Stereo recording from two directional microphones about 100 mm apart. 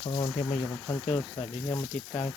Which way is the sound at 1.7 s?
25° left (ahead or behind).